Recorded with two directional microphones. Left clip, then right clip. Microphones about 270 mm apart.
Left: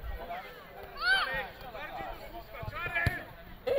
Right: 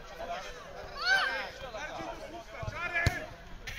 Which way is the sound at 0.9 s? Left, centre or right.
Left.